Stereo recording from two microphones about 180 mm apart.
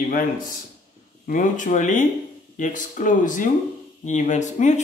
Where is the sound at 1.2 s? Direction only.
45° left (ahead or behind).